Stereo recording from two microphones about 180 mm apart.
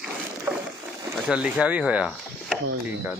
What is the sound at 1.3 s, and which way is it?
Speech, 5° right (ahead or behind).